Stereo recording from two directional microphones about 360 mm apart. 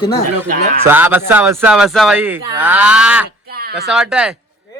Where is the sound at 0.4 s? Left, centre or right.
Right.